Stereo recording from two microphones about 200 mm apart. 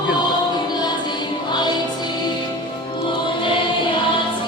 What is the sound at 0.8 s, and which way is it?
Music, 20° left (ahead or behind).